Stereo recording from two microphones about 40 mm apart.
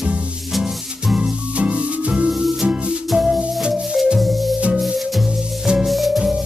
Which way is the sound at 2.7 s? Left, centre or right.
Centre.